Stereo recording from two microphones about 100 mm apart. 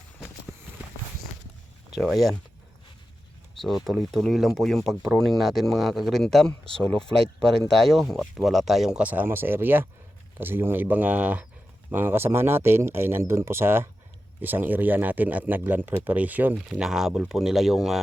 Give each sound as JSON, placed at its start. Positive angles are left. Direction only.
{"t": 2.0, "sound": "speech", "side_deg": 0}
{"t": 3.6, "sound": "speech", "side_deg": 0}